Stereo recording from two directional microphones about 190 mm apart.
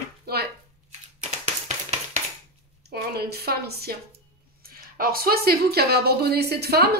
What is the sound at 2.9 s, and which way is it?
Speech, 55° right (ahead or behind).